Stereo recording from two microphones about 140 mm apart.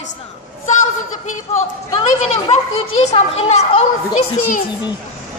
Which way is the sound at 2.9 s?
50° left (ahead or behind).